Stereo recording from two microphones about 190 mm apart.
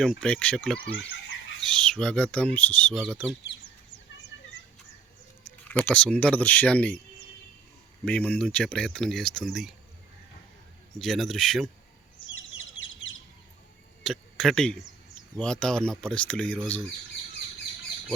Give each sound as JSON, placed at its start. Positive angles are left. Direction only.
{"t": 0.0, "sound": "speech", "side_deg": 0}
{"t": 0.9, "sound": "chicken", "side_deg": 80}
{"t": 1.6, "sound": "speech", "side_deg": 5}
{"t": 5.4, "sound": "speech", "side_deg": 10}
{"t": 8.0, "sound": "speech", "side_deg": 5}
{"t": 10.9, "sound": "speech", "side_deg": 0}
{"t": 14.0, "sound": "speech", "side_deg": 0}